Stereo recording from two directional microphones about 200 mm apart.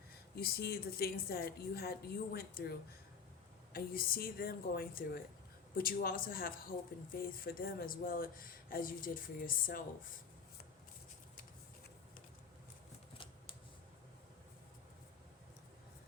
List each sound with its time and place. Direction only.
0.3 s speech: 50° left (ahead or behind)